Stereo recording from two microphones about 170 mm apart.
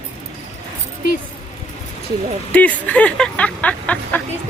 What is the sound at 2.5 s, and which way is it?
Speech, 10° left (ahead or behind).